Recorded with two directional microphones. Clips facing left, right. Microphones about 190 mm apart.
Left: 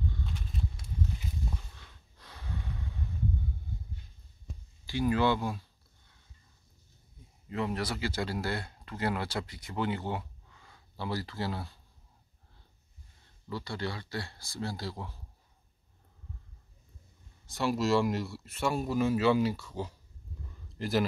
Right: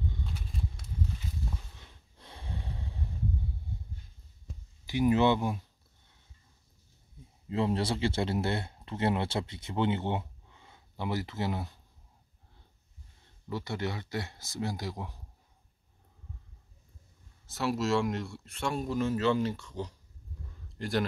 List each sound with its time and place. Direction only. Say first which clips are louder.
1.8 s snort: right 1 dB; 25° right (ahead or behind)
4.8 s speech: right 3 dB; 20° right (ahead or behind)
7.4 s speech: right 4 dB; 25° right (ahead or behind)
13.5 s speech: right 2 dB; 20° right (ahead or behind)
17.5 s a man's voice: left 1 dB; centre (ahead or behind)